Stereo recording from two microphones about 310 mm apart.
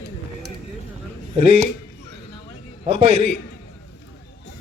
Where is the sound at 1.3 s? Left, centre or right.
Centre.